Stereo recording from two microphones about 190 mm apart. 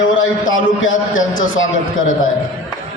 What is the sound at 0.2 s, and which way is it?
A man's voice, 90° left.